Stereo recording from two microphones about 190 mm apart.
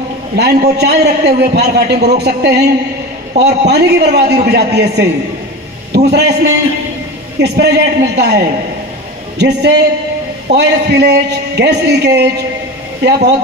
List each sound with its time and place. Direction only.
0.4 s a man's voice: 55° right (ahead or behind)
7.3 s a man's voice: 60° right (ahead or behind)